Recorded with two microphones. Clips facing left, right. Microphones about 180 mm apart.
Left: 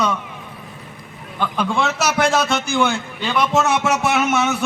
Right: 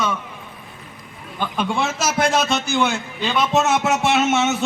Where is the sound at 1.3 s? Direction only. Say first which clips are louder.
Left 2 dB; 20° right (ahead or behind).